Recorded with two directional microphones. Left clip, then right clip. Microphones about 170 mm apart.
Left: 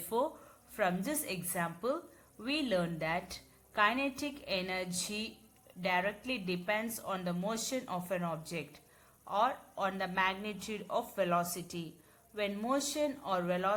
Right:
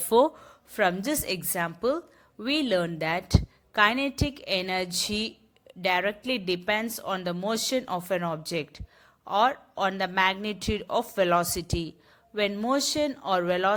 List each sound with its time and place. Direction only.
0.1 s a woman's voice: 40° right (ahead or behind)